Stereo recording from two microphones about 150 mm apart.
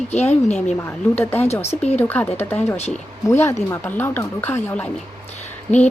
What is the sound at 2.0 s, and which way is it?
Speech, 10° left (ahead or behind).